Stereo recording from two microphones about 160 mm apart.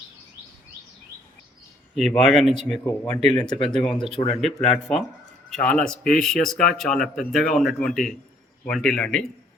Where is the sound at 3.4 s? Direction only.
30° left (ahead or behind).